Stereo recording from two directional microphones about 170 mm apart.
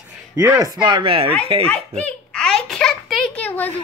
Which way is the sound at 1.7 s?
5° left (ahead or behind).